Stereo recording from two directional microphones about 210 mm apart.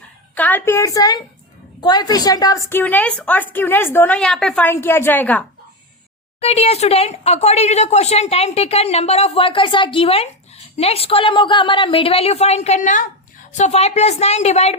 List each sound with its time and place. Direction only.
0.3 s a woman's voice: 10° left (ahead or behind)
6.4 s a woman's voice: 30° left (ahead or behind)